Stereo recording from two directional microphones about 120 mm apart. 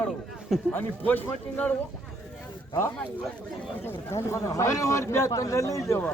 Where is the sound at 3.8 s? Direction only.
20° left (ahead or behind).